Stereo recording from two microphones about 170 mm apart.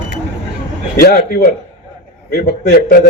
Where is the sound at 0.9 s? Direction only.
65° left (ahead or behind).